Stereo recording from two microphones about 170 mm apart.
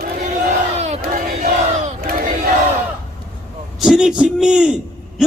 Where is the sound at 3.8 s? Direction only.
5° right (ahead or behind).